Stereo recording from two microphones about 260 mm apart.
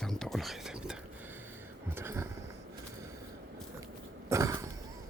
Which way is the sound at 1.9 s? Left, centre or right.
Centre.